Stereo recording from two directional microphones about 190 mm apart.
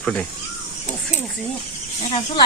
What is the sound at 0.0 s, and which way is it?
Speech, 5° left (ahead or behind).